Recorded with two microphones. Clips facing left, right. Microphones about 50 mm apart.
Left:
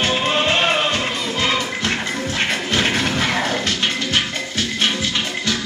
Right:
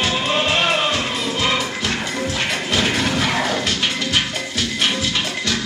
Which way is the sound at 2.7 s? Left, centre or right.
Left.